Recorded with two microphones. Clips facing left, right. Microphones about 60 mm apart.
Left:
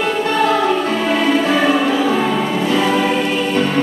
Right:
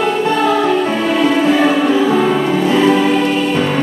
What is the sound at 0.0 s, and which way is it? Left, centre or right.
Music, centre.